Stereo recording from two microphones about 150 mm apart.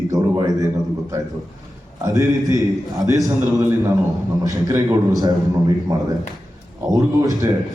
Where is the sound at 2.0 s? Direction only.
20° right (ahead or behind).